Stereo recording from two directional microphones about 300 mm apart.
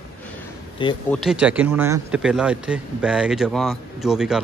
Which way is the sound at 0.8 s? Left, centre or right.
Centre.